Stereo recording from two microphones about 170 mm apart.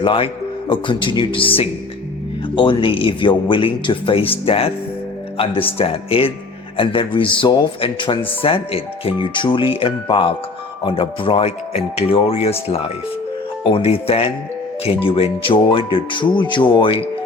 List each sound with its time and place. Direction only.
0.0 s speech: 30° left (ahead or behind)
2.6 s speech: 30° left (ahead or behind)
5.7 s speech: 35° left (ahead or behind)